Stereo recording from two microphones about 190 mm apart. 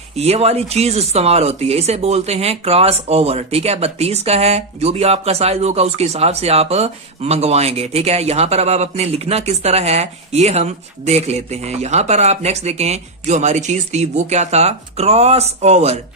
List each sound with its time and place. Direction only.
0.2 s speech: 35° right (ahead or behind)